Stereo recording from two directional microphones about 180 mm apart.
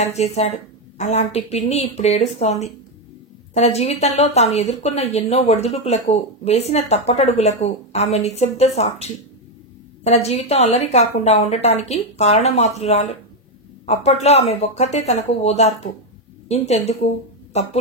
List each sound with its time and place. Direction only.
0.0 s speech: 40° left (ahead or behind)
10.0 s a woman's voice: 35° left (ahead or behind)